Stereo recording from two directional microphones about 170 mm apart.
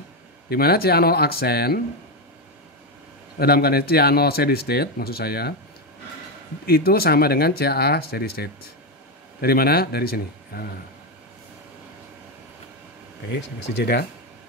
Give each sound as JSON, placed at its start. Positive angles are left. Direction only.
{"t": 0.5, "sound": "speech", "side_deg": 65}
{"t": 3.3, "sound": "speech", "side_deg": 65}
{"t": 6.6, "sound": "speech", "side_deg": 65}